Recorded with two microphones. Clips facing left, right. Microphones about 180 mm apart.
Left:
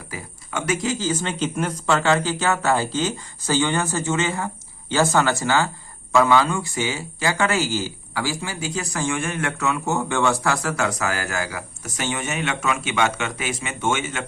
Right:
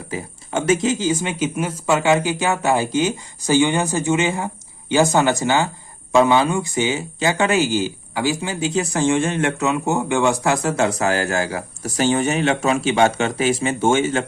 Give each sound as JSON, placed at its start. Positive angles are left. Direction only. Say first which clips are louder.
{"t": 0.1, "sound": "speech", "louder": "right 6 dB", "side_deg": -25}